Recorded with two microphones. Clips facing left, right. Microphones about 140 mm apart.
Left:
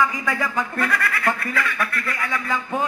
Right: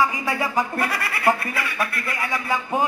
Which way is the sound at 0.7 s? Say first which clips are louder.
Left 2 dB; 15° right (ahead or behind).